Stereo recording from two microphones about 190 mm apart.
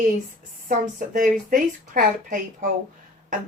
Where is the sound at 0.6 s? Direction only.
45° right (ahead or behind).